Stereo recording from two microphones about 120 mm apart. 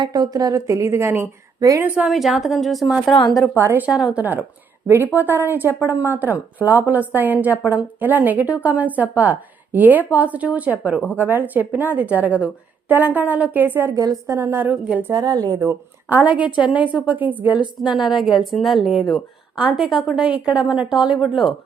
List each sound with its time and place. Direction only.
0.0 s a woman's voice: 35° right (ahead or behind)
1.5 s a woman's voice: 30° right (ahead or behind)
2.0 s a woman's voice: centre (ahead or behind)
3.6 s a woman's voice: 20° right (ahead or behind)
3.8 s a woman's voice: 5° right (ahead or behind)
13.9 s a woman's voice: 30° right (ahead or behind); by 15.1 s 15° right (ahead or behind)
15.1 s a woman's voice: 30° right (ahead or behind)
16.0 s speech: 15° right (ahead or behind)
17.7 s a woman's voice: 5° right (ahead or behind)